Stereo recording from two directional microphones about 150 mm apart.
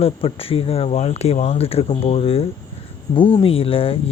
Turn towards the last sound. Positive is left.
turn(degrees=40)  # may be behind; listen again after turning